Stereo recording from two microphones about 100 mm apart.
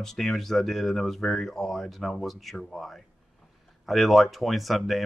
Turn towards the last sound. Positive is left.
turn(degrees=0)  # may be behind; listen again after turning